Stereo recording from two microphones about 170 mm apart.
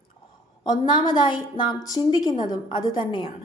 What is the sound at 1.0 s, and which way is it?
A woman's voice, 25° left (ahead or behind).